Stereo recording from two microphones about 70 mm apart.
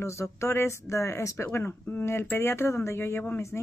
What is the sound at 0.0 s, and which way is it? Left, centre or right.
Speech, left.